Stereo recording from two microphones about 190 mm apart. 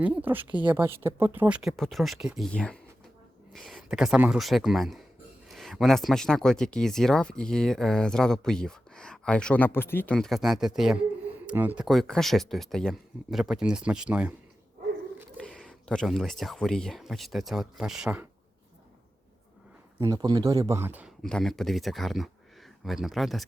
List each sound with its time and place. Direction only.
0.0 s speech: 10° right (ahead or behind)
15.4 s speech: 5° left (ahead or behind)
20.0 s speech: 20° right (ahead or behind)
21.2 s speech: 5° left (ahead or behind)